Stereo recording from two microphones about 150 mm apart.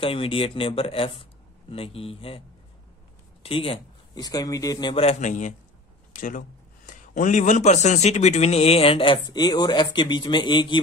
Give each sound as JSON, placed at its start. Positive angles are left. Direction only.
{"t": 0.0, "sound": "speech", "side_deg": 40}
{"t": 3.4, "sound": "speech", "side_deg": 40}
{"t": 4.1, "sound": "speech", "side_deg": 25}
{"t": 5.0, "sound": "a man's voice", "side_deg": 55}
{"t": 6.1, "sound": "a man's voice", "side_deg": 65}